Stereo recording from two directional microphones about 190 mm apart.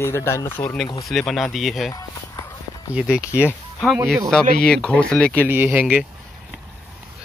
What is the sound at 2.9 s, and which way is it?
Speech, 5° right (ahead or behind).